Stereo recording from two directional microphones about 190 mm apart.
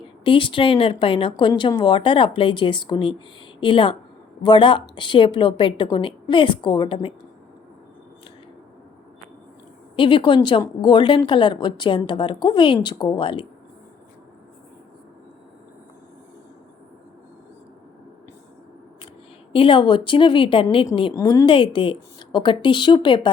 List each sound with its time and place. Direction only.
0.3 s speech: 25° left (ahead or behind)
9.9 s speech: 25° left (ahead or behind)
19.5 s speech: 25° left (ahead or behind)